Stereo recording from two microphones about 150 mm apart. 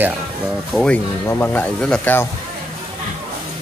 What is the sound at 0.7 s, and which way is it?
Speech, 5° left (ahead or behind).